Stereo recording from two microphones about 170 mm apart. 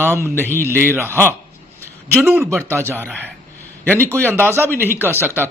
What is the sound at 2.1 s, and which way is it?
A man's voice, 15° right (ahead or behind).